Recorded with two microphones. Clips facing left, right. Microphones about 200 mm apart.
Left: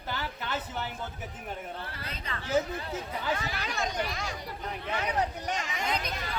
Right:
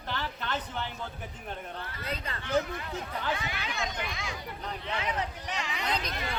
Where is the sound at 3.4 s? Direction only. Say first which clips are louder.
Left 2 dB; 40° left (ahead or behind).